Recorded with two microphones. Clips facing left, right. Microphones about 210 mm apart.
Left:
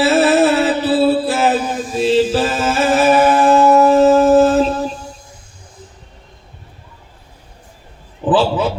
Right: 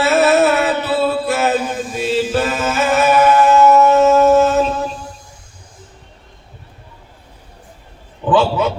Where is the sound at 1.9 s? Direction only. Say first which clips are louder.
Left 5 dB; 30° left (ahead or behind).